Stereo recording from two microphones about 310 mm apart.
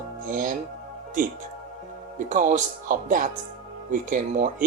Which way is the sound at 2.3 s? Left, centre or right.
Right.